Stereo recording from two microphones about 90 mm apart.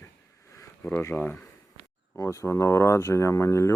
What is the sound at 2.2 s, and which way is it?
Speech, 30° left (ahead or behind).